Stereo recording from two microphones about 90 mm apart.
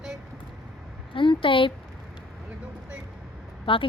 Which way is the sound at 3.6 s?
75° left (ahead or behind).